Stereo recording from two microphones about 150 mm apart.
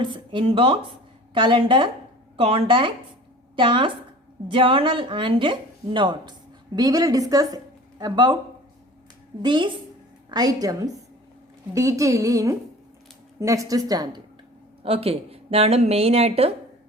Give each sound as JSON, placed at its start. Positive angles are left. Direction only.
{"t": 0.0, "sound": "a woman's voice", "side_deg": -35}
{"t": 9.4, "sound": "speech", "side_deg": -30}
{"t": 14.8, "sound": "a woman's voice", "side_deg": -40}